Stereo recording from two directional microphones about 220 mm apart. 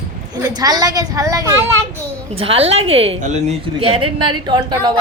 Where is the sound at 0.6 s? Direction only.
15° right (ahead or behind).